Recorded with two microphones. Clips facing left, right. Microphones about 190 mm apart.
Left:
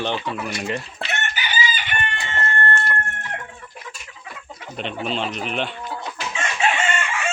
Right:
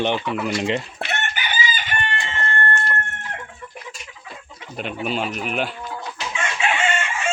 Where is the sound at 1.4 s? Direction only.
50° right (ahead or behind).